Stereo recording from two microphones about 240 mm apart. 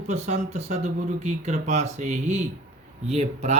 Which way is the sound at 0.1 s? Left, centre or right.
Right.